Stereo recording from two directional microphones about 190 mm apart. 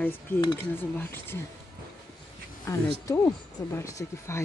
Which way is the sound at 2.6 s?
15° left (ahead or behind).